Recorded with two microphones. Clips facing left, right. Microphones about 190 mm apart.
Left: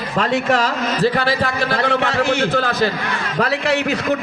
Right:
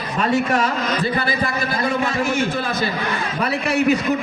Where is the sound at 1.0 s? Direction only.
80° left.